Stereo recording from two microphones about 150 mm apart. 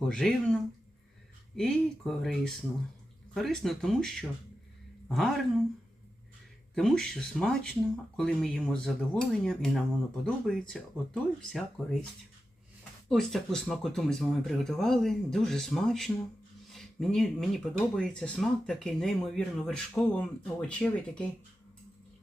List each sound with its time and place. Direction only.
0.1 s speech: 5° left (ahead or behind)
6.7 s speech: 5° left (ahead or behind)
13.1 s speech: centre (ahead or behind)